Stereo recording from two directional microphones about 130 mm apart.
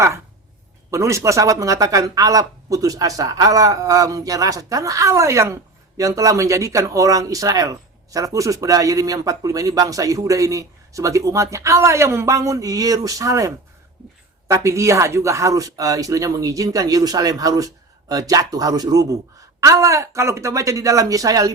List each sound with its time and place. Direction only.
0.9 s speech: 20° right (ahead or behind)